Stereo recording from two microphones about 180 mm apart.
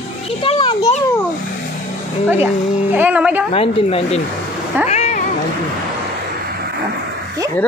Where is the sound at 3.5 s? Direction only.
35° left (ahead or behind).